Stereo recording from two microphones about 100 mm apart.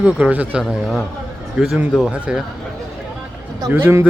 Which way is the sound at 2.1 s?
10° right (ahead or behind).